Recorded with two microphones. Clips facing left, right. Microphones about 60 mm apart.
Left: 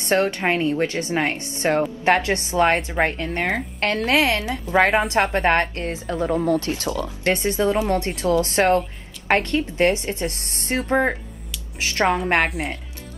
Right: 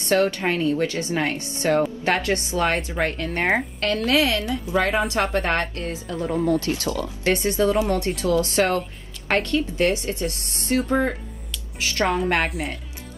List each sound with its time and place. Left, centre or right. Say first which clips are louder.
0.0 s a woman's voice: even; left
6.3 s speech: even; left
6.6 s a woman's voice: even; left
12.4 s speech: left 2 dB; centre